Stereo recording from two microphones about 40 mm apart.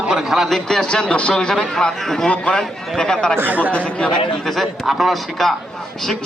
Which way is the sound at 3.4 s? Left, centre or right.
Right.